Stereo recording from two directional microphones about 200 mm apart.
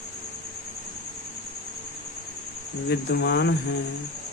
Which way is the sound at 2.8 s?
55° left (ahead or behind).